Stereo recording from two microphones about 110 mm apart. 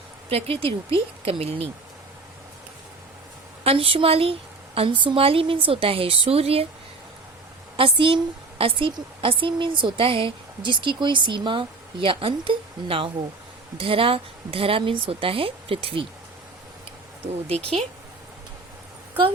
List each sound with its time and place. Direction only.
0.3 s a woman's voice: 60° right (ahead or behind)
3.6 s a woman's voice: 60° right (ahead or behind)
7.8 s a woman's voice: 55° right (ahead or behind)